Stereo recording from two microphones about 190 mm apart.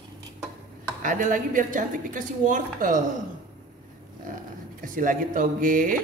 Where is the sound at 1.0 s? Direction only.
45° right (ahead or behind).